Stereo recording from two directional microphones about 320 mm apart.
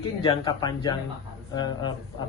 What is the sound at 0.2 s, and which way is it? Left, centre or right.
Speech, centre.